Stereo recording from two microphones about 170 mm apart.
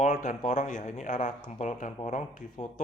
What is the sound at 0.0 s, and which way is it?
Speech, 50° left (ahead or behind).